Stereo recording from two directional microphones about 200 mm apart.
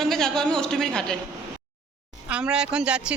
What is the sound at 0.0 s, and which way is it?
A woman's voice, centre (ahead or behind).